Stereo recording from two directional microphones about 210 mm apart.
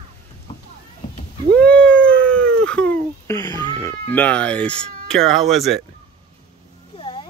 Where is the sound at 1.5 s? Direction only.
5° left (ahead or behind).